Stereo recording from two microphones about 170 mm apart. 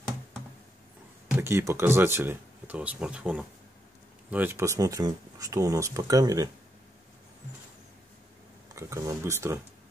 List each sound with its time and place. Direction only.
1.4 s speech: 15° right (ahead or behind)
8.7 s speech: 15° right (ahead or behind)